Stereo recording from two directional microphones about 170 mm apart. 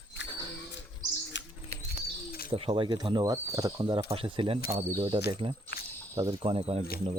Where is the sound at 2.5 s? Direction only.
30° right (ahead or behind).